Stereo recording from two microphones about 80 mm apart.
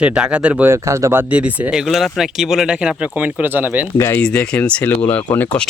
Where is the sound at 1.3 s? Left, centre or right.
Centre.